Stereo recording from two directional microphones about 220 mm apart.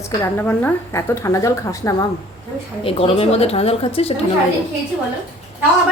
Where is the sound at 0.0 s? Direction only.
10° left (ahead or behind).